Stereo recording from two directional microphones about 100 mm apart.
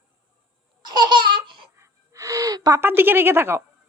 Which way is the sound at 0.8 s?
45° right (ahead or behind).